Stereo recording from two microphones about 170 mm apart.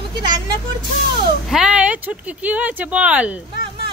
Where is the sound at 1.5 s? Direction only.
5° right (ahead or behind).